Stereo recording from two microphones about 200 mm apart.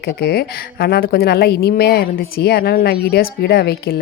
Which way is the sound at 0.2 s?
55° left (ahead or behind).